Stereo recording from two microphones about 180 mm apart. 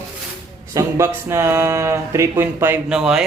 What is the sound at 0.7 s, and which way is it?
Speech, 15° right (ahead or behind).